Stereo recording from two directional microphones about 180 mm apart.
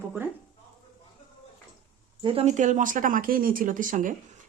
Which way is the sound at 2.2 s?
30° right (ahead or behind).